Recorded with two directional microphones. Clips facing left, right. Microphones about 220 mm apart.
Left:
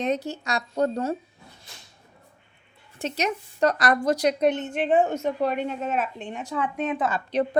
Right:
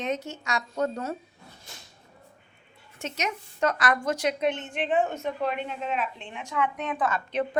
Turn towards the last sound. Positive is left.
turn(degrees=35)  # may be behind; listen again after turning